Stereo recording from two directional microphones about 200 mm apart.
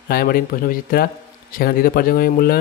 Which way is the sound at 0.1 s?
50° left (ahead or behind).